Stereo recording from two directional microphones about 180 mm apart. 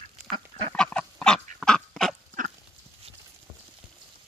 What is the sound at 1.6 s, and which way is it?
Duck, 5° left (ahead or behind).